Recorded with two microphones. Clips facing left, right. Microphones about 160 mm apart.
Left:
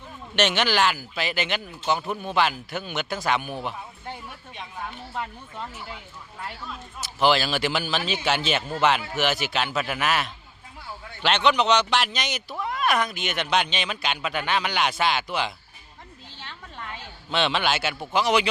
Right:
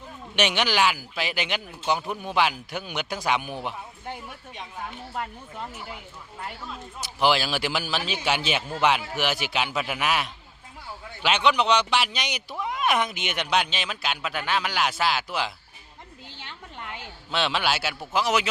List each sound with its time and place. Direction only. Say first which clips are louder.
0.3 s speech: left 1 dB; 10° right (ahead or behind)
7.0 s speech: left 1 dB; 10° right (ahead or behind)
16.4 s a sound: left 1 dB; 15° right (ahead or behind)
17.3 s speech: left 2 dB; 5° right (ahead or behind)